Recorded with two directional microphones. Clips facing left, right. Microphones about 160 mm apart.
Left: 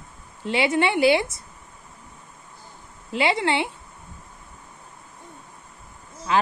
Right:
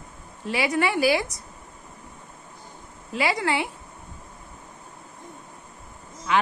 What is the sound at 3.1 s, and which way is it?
Speech, 25° left (ahead or behind).